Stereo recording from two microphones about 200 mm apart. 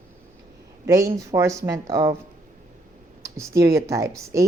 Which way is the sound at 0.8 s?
15° right (ahead or behind).